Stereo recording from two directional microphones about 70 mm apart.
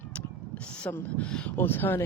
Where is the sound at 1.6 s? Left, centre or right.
Left.